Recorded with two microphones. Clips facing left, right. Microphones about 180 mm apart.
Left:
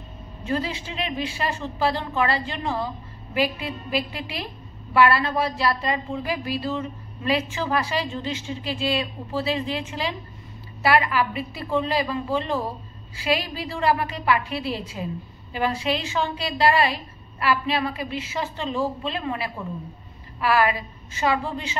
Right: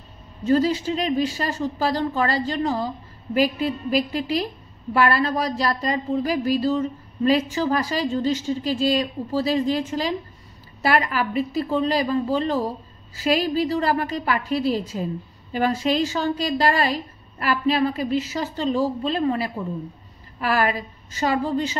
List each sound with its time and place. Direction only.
0.5 s a woman's voice: 40° right (ahead or behind)